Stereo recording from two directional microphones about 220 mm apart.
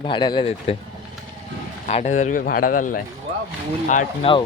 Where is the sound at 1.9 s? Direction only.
30° left (ahead or behind).